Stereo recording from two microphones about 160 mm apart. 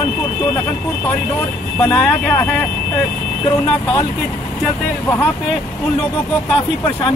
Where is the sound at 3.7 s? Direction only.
30° left (ahead or behind).